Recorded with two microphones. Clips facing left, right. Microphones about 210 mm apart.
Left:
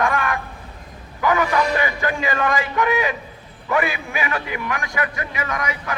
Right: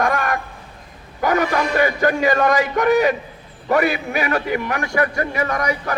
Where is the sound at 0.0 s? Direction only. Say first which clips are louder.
Right 1 dB; 40° right (ahead or behind).